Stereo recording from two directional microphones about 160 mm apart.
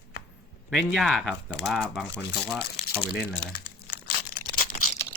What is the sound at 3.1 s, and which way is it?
Speech, 75° left (ahead or behind).